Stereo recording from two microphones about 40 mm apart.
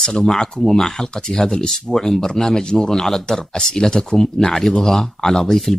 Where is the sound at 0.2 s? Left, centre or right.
Centre.